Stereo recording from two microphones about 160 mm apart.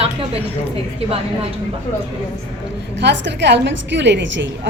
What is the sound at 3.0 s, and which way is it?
A woman's voice, 90° right.